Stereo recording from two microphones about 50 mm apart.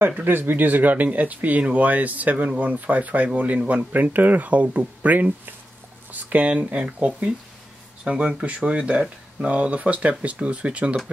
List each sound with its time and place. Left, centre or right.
0.2 s speech: right